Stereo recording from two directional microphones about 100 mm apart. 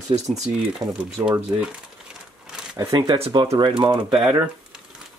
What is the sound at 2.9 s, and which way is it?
Speech, 50° right (ahead or behind).